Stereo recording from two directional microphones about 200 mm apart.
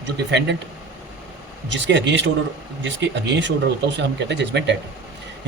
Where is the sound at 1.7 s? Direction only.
65° right (ahead or behind).